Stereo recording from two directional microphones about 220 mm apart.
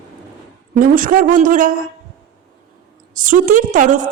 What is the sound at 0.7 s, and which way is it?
A woman's voice, 40° right (ahead or behind).